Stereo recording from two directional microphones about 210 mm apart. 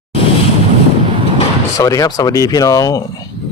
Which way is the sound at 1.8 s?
15° left (ahead or behind).